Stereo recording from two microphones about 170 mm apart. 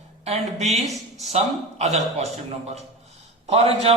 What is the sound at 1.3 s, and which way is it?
Speech, 40° right (ahead or behind).